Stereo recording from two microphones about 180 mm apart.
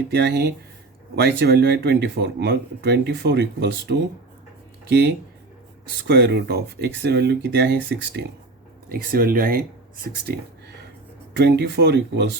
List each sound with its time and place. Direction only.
0.1 s speech: 70° right (ahead or behind)
6.1 s speech: 70° right (ahead or behind)
8.9 s speech: 55° right (ahead or behind)
11.3 s speech: 70° right (ahead or behind)